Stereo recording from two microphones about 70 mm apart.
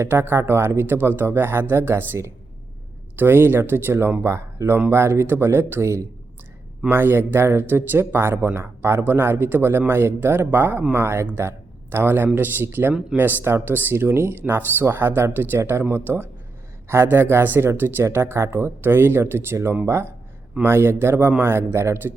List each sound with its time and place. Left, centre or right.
0.0 s speech: right
3.2 s speech: right